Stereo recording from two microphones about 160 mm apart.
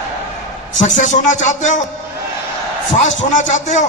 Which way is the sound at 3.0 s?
50° left (ahead or behind).